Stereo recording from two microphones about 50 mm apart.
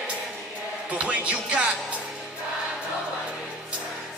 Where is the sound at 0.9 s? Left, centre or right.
Right.